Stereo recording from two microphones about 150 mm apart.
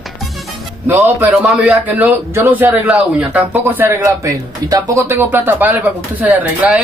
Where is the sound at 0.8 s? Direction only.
15° right (ahead or behind).